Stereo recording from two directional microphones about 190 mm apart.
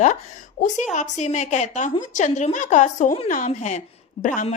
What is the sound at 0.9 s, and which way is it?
A woman's voice, 40° left (ahead or behind).